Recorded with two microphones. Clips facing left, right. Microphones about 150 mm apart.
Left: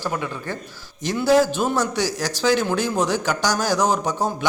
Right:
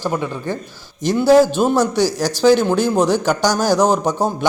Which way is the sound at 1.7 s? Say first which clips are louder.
Right 6 dB; 30° right (ahead or behind).